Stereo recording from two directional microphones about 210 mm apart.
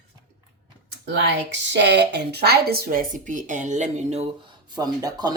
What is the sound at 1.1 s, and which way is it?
A woman's voice, 55° right (ahead or behind).